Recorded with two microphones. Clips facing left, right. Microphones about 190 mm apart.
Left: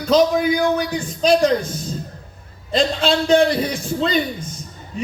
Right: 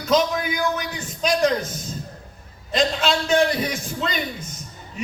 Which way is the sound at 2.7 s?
30° left (ahead or behind).